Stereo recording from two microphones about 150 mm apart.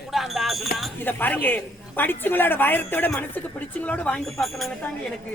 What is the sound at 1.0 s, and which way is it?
A woman's voice, 10° left (ahead or behind).